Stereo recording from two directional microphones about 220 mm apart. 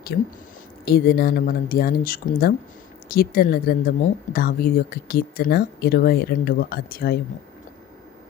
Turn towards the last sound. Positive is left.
turn(degrees=45)  # may be behind; listen again after turning